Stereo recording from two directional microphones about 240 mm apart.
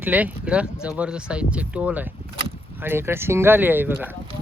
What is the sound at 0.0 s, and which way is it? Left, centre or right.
Speech, centre.